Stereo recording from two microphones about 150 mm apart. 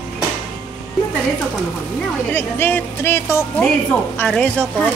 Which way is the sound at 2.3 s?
15° left (ahead or behind).